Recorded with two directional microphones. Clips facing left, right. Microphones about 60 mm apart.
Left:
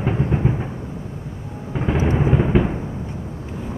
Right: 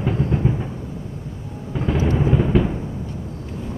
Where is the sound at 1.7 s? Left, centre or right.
Left.